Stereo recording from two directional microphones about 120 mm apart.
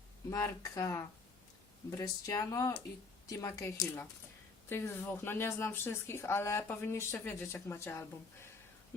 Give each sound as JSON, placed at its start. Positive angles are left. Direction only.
{"t": 0.3, "sound": "speech", "side_deg": 25}